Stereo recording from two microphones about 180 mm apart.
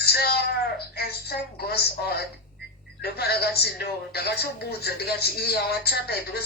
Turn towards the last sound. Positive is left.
turn(degrees=60)  # may be behind; listen again after turning